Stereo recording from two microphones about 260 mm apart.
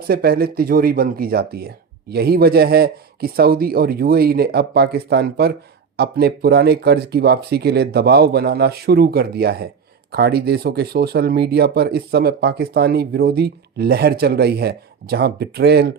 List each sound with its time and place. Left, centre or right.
0.1 s speech: right